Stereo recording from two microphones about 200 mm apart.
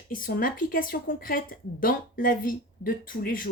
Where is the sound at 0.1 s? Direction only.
45° left (ahead or behind).